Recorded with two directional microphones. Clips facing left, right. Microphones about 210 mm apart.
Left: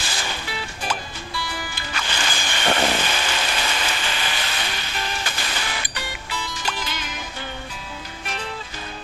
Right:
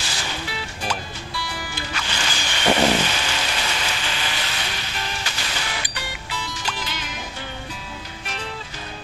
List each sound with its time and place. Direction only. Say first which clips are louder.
0.0 s music: even; 55° left (ahead or behind)
2.0 s music: left 3 dB; 50° left (ahead or behind)
2.9 s a sound: right 2 dB; 55° left (ahead or behind)